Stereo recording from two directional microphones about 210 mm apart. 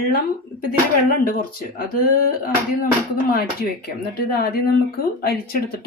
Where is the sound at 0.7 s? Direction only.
45° left (ahead or behind).